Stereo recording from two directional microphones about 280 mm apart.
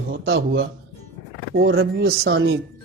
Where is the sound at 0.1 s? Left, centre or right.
Right.